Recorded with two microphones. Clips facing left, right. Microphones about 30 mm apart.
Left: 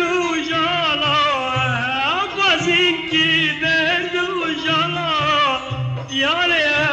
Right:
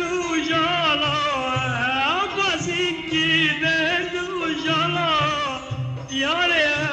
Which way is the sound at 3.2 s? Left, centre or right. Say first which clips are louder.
Even; centre.